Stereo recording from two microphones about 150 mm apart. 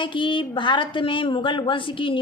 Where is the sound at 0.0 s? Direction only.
30° left (ahead or behind).